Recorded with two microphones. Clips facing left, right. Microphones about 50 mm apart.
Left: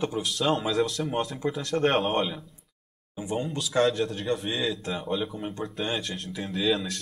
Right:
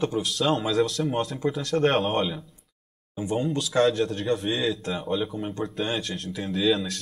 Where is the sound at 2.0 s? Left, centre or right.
Centre.